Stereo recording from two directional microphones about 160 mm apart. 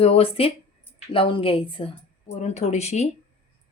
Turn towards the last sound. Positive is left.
turn(degrees=45)  # may be behind; listen again after turning